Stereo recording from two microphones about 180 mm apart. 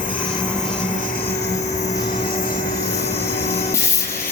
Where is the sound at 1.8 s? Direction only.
40° left (ahead or behind).